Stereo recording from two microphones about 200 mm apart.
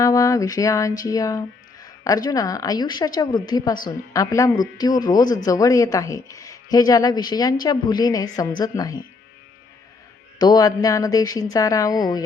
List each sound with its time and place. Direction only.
0.0 s speech: 15° left (ahead or behind)
10.3 s speech: 20° left (ahead or behind)